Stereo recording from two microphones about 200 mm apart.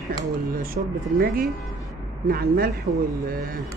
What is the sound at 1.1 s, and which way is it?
Speech, 50° right (ahead or behind).